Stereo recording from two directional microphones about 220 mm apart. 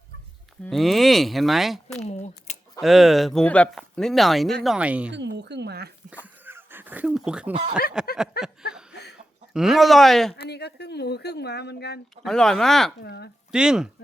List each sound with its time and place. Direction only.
0.6 s speech: centre (ahead or behind)
2.0 s a sound: 30° left (ahead or behind)
2.8 s speech: centre (ahead or behind)
5.1 s a woman's voice: 50° right (ahead or behind)
6.4 s dog: 10° right (ahead or behind)
8.0 s speech: 5° right (ahead or behind)
8.4 s speech: 45° left (ahead or behind)
9.5 s speech: centre (ahead or behind)
10.3 s speech: 45° left (ahead or behind)
12.1 s speech: centre (ahead or behind)
13.0 s speech: 50° left (ahead or behind)
13.5 s speech: 5° right (ahead or behind)